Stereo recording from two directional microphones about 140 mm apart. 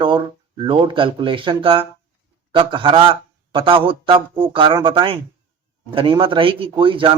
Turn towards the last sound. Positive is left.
turn(degrees=-40)  # may be behind; listen again after turning